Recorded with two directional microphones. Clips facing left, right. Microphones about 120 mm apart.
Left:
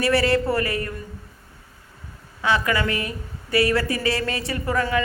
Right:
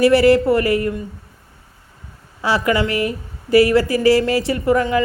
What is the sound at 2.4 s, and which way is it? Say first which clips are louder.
Speech: right 4 dB; 25° right (ahead or behind).